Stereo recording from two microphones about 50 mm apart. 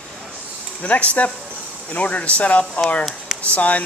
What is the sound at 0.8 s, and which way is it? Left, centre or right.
Speech, left.